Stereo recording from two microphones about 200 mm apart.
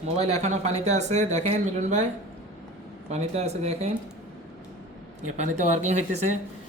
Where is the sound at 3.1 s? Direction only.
30° right (ahead or behind).